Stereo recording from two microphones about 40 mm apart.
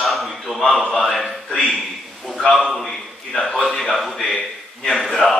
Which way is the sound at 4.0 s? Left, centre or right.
Centre.